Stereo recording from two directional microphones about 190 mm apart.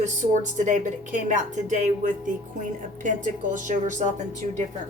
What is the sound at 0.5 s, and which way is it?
A woman's voice, 40° right (ahead or behind).